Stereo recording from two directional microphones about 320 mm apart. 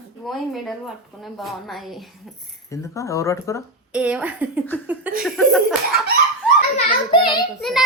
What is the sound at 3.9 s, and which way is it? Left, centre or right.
A child's voice, centre.